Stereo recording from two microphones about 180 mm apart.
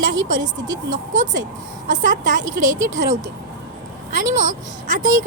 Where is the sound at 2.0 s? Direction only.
45° right (ahead or behind).